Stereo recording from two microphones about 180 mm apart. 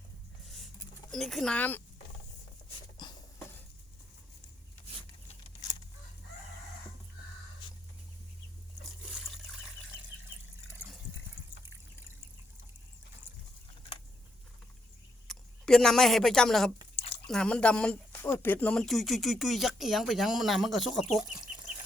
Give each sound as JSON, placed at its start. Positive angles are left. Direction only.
{"t": 1.1, "sound": "speech", "side_deg": 0}
{"t": 3.0, "sound": "filing", "side_deg": 25}
{"t": 15.3, "sound": "speech", "side_deg": 5}